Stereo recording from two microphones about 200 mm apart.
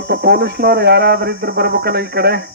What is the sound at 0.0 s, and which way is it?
Speech, 55° right (ahead or behind).